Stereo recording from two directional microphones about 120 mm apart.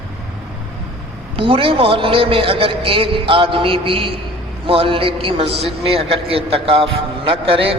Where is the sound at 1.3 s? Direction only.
50° right (ahead or behind).